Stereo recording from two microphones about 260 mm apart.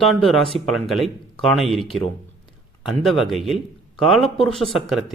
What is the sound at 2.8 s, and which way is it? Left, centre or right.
A man's voice, centre.